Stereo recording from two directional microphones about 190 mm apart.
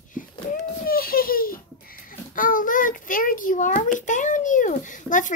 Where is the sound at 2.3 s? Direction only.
45° left (ahead or behind).